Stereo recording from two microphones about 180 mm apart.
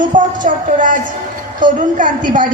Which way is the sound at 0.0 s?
45° right (ahead or behind).